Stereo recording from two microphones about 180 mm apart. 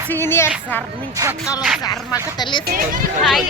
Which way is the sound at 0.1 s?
15° left (ahead or behind).